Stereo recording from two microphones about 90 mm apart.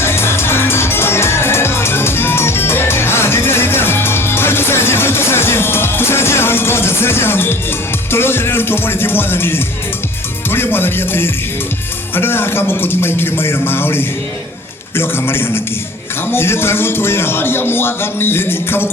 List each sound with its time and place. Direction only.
0.0 s music: 25° left (ahead or behind)
12.1 s speech: 25° left (ahead or behind)